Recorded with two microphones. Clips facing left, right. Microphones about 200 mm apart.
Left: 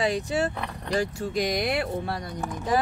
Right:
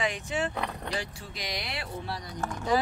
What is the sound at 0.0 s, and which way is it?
Speech, 35° left (ahead or behind).